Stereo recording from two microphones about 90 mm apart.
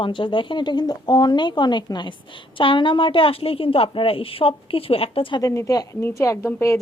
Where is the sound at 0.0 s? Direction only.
65° left (ahead or behind); by 5.4 s 85° left.